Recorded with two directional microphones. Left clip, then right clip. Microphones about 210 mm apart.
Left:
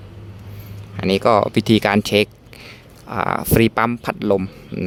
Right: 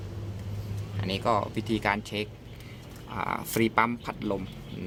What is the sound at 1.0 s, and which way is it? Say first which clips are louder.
Speech: left 12 dB; 50° left (ahead or behind).